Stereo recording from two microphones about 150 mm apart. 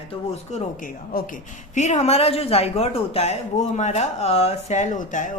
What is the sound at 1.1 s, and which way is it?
Speech, 75° left (ahead or behind).